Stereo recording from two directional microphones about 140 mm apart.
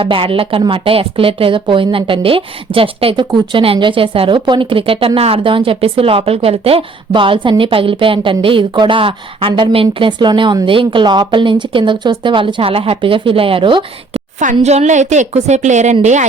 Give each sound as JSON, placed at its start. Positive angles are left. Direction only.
{"t": 0.0, "sound": "speech", "side_deg": -40}
{"t": 14.3, "sound": "a woman's voice", "side_deg": -55}